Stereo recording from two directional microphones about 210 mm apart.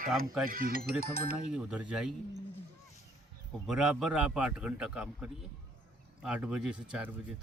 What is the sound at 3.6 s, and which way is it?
A man's voice, 5° right (ahead or behind).